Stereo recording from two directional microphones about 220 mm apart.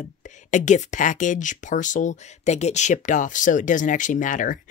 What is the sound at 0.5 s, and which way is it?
Speech, 35° left (ahead or behind).